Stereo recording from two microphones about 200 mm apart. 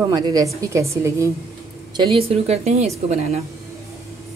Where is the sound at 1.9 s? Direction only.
25° right (ahead or behind).